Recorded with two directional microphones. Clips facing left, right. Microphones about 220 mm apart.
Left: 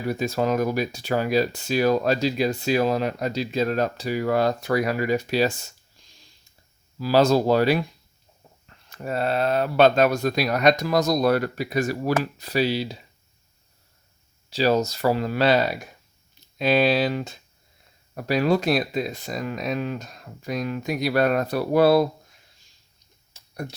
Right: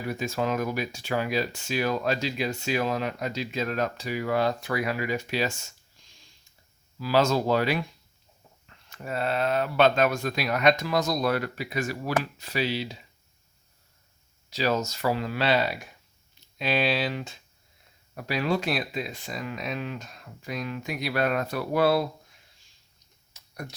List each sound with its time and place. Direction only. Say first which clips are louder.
0.1 s speech: left 5 dB; 35° left (ahead or behind)
6.0 s a sound: left 3 dB; 35° left (ahead or behind)
7.0 s speech: left 5 dB; 35° left (ahead or behind)
8.9 s speech: left 4 dB; 40° left (ahead or behind)
14.5 s speech: left 6 dB; 35° left (ahead or behind)
23.3 s a sound: left 2 dB; 30° left (ahead or behind)